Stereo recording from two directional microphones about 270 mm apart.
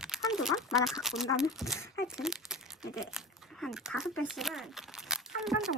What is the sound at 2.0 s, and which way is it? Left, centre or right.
Crumpling, centre.